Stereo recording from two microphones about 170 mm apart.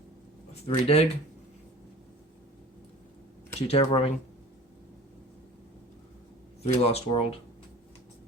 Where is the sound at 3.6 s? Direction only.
35° left (ahead or behind).